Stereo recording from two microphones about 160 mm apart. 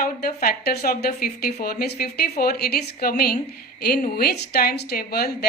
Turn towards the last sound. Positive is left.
turn(degrees=70)  # may be behind; listen again after turning